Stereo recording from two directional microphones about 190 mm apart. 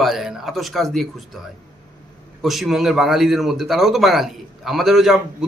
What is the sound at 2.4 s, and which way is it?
A man's voice, centre (ahead or behind).